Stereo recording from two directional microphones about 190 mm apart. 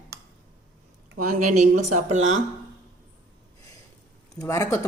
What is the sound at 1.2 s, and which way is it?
Speech, 45° right (ahead or behind).